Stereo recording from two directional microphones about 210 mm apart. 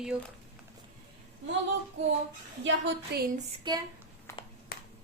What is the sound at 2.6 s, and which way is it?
Speech, 60° right (ahead or behind).